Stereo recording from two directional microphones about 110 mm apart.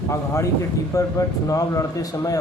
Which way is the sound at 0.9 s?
30° left (ahead or behind).